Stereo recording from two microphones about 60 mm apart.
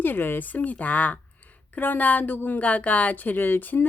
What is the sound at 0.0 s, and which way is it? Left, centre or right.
A woman's voice, left.